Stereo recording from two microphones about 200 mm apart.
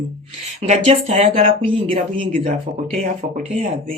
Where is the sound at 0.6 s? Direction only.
35° right (ahead or behind).